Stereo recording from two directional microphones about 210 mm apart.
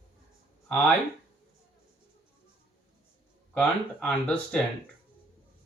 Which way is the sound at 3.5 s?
5° left (ahead or behind).